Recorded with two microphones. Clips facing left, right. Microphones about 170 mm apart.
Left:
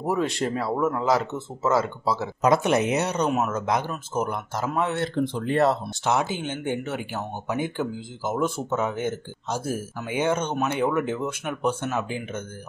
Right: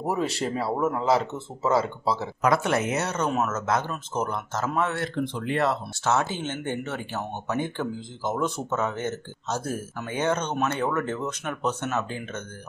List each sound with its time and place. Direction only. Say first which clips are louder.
0.0 s speech: left 2 dB; centre (ahead or behind)
2.4 s speech: left 3 dB; 20° left (ahead or behind)
5.0 s speech: left 3 dB; 35° left (ahead or behind)
6.0 s speech: left 1 dB; 15° left (ahead or behind)